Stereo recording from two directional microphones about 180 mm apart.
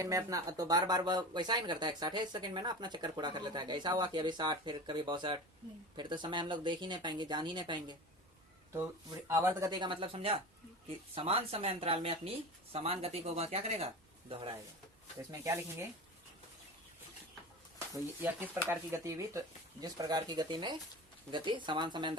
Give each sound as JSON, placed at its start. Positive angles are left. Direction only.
{"t": 0.0, "sound": "speech", "side_deg": -20}
{"t": 15.3, "sound": "speech", "side_deg": -15}
{"t": 17.9, "sound": "speech", "side_deg": -10}